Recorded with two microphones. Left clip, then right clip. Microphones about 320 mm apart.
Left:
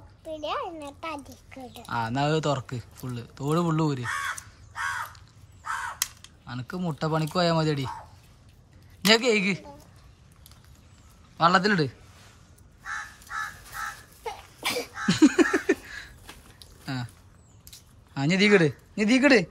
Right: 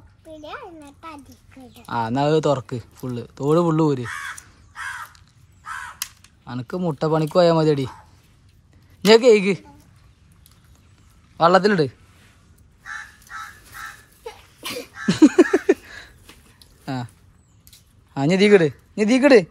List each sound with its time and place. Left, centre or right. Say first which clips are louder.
0.7 s speech: left 3 dB; centre
1.9 s speech: right 6 dB; centre
6.4 s speech: right 8 dB; centre
9.0 s speech: right 8 dB; centre
11.3 s speech: right 6 dB; centre
14.2 s a sound: left 3 dB; centre
18.1 s speech: right 6 dB; centre